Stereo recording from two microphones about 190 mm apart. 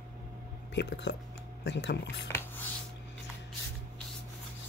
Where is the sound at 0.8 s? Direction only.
65° left (ahead or behind).